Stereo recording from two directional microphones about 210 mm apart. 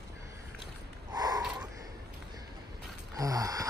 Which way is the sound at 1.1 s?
20° right (ahead or behind).